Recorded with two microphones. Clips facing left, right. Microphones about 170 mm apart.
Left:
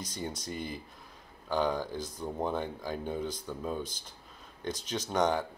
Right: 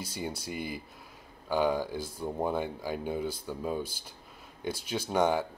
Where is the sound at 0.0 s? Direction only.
10° right (ahead or behind).